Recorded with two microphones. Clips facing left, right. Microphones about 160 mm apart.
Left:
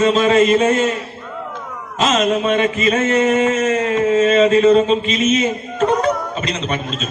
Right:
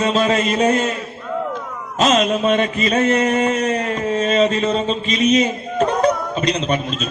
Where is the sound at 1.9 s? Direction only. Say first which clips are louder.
Right 2 dB; 40° right (ahead or behind).